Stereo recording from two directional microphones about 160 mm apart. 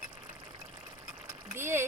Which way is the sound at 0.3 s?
25° right (ahead or behind).